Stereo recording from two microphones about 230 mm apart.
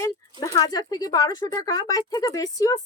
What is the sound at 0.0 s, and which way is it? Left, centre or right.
Speech, centre.